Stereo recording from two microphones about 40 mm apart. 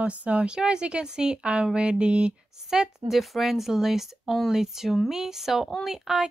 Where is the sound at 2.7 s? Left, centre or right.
Centre.